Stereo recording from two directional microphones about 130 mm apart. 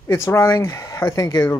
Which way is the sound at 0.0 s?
20° left (ahead or behind).